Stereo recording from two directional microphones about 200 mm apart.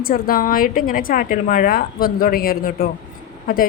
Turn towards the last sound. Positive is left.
turn(degrees=45)  # may be behind; listen again after turning